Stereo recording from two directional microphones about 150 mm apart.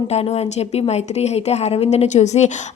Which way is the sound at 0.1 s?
45° left (ahead or behind).